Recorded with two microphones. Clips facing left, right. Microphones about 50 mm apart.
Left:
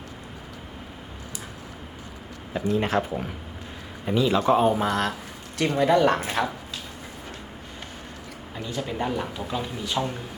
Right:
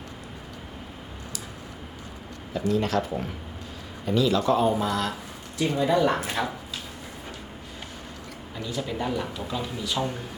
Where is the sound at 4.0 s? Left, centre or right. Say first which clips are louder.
Left 1 dB; left.